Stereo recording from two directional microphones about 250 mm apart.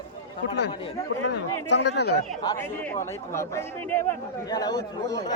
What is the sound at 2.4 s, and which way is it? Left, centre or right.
Speech, centre.